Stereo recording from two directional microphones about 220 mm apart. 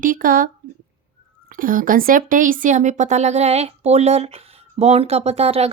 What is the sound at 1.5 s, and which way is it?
Speech, 40° right (ahead or behind).